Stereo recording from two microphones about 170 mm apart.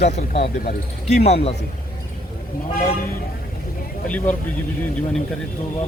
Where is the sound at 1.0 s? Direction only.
40° left (ahead or behind).